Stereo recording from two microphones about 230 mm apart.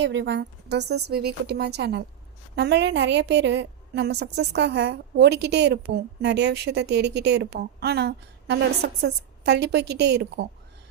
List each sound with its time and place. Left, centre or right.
0.0 s a woman's voice: right